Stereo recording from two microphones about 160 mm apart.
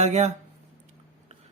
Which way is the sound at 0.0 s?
45° right (ahead or behind).